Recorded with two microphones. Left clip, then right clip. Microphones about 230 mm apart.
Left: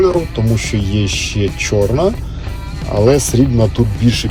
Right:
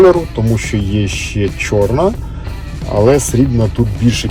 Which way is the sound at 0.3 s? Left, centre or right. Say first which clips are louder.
Right 1 dB; centre.